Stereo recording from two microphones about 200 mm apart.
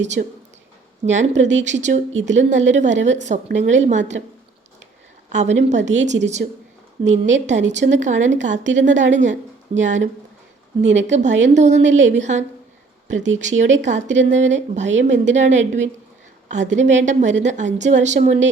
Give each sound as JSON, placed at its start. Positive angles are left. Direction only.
{"t": 0.2, "sound": "speech", "side_deg": -50}
{"t": 1.0, "sound": "a woman's voice", "side_deg": -35}
{"t": 5.3, "sound": "a woman's voice", "side_deg": -35}
{"t": 13.7, "sound": "a woman's voice", "side_deg": -35}